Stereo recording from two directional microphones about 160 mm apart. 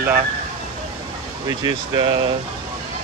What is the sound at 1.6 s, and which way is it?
Speech, 30° right (ahead or behind).